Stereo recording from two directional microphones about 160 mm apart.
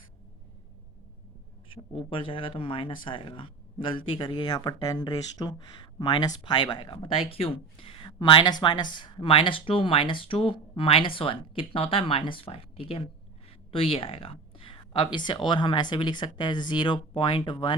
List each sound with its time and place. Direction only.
1.7 s speech: 35° left (ahead or behind)